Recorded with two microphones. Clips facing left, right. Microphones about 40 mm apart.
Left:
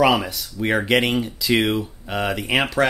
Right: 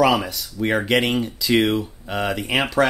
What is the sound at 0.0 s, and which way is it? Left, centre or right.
Speech, centre.